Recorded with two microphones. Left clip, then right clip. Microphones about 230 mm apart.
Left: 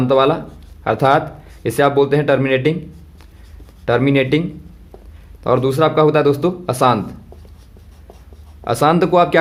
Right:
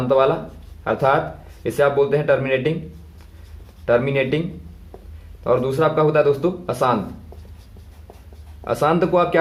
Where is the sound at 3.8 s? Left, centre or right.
Left.